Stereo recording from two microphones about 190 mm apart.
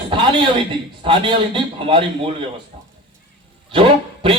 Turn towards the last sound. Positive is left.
turn(degrees=-25)  # may be behind; listen again after turning